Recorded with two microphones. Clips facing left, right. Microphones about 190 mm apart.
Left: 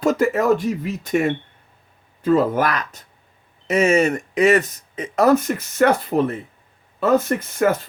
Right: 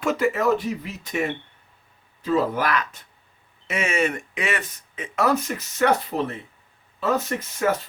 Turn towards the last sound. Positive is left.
turn(degrees=50)  # may be behind; listen again after turning